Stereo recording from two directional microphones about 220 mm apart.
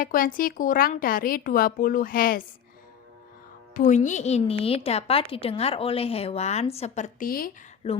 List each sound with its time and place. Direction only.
0.0 s a woman's voice: 40° left (ahead or behind)
3.8 s a woman's voice: 35° left (ahead or behind)
7.8 s a woman's voice: 25° left (ahead or behind)